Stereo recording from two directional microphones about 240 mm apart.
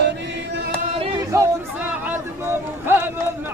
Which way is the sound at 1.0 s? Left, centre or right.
Centre.